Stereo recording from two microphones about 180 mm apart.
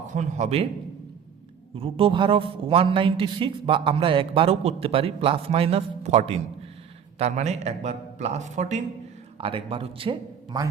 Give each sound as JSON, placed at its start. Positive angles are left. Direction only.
{"t": 0.1, "sound": "a man's voice", "side_deg": -40}
{"t": 1.7, "sound": "a man's voice", "side_deg": -30}